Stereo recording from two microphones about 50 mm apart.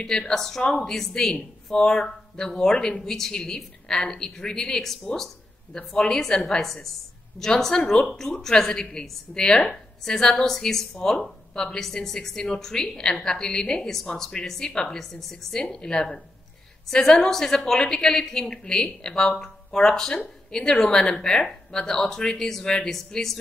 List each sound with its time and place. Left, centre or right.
0.0 s a woman's voice: centre
0.6 s a woman's voice: centre